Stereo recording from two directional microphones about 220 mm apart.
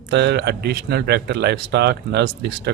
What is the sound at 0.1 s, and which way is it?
Speech, 50° right (ahead or behind).